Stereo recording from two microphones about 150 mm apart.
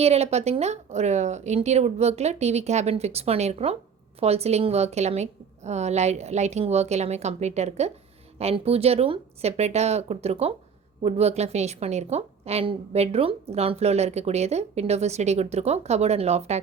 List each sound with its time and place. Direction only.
0.0 s a woman's voice: 45° right (ahead or behind)